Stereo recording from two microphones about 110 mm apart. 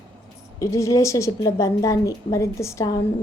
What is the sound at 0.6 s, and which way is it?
A woman's voice, 30° left (ahead or behind).